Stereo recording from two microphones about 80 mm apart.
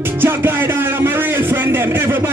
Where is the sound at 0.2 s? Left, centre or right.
Right.